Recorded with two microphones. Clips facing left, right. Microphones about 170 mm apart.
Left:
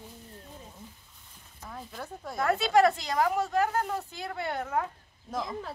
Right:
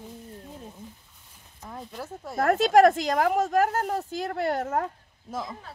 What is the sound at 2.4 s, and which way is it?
A woman's voice, 50° right (ahead or behind).